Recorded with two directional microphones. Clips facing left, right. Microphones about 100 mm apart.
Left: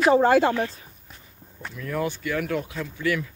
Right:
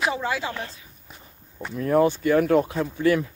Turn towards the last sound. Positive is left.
turn(degrees=-35)  # may be behind; listen again after turning